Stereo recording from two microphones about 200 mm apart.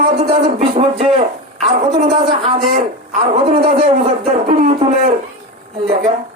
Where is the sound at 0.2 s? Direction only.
30° right (ahead or behind).